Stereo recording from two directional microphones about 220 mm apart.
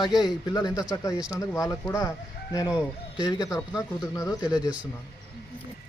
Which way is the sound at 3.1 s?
15° left (ahead or behind).